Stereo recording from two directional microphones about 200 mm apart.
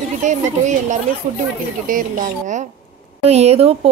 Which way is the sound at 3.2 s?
30° right (ahead or behind).